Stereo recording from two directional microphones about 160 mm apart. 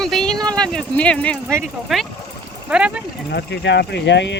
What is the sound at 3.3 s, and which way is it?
Speech, 90° left.